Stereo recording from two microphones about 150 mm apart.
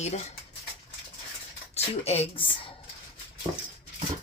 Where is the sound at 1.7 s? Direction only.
40° left (ahead or behind).